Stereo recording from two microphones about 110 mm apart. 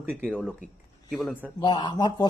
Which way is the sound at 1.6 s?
45° left (ahead or behind).